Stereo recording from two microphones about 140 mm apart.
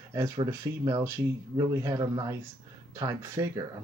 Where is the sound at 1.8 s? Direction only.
25° right (ahead or behind).